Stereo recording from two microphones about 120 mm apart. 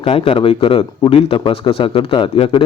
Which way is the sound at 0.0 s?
50° left (ahead or behind).